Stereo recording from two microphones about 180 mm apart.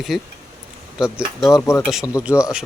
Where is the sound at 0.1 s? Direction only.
Centre (ahead or behind).